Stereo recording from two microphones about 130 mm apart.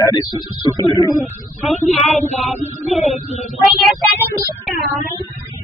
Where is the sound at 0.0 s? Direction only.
30° left (ahead or behind).